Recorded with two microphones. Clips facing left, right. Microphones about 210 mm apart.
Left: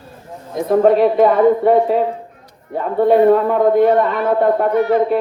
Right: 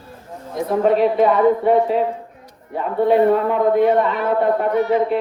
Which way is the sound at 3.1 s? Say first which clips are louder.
Left 4 dB; 45° left (ahead or behind).